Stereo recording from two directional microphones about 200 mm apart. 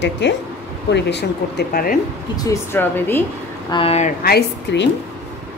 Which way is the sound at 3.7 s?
25° left (ahead or behind).